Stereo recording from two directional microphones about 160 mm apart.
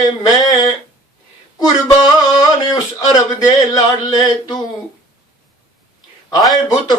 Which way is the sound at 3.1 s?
25° left (ahead or behind).